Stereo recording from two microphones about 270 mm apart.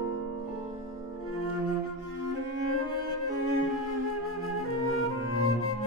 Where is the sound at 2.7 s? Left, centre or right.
Left.